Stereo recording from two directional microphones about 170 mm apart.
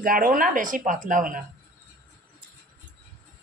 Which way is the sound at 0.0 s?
55° right (ahead or behind).